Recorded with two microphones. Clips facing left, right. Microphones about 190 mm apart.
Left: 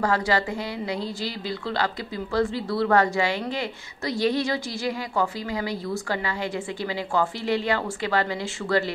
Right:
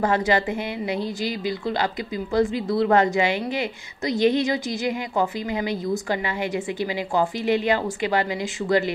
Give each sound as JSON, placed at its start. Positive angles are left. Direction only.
{"t": 0.0, "sound": "a woman's voice", "side_deg": -20}